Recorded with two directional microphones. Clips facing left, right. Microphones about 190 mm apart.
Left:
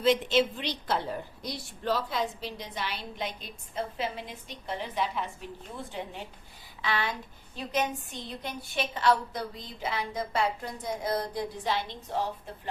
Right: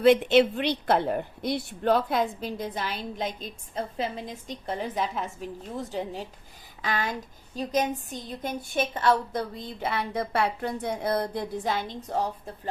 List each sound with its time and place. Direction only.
0.0 s a woman's voice: 60° right (ahead or behind)